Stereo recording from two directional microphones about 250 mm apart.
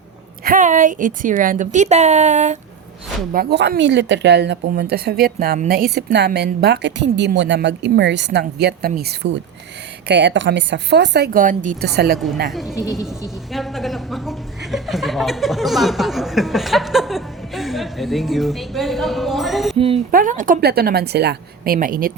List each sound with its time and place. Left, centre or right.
0.4 s a woman's voice: right
3.3 s a woman's voice: right
12.5 s speech: centre
12.7 s a woman's voice: centre
13.5 s speech: centre
19.7 s speech: right
20.1 s a woman's voice: right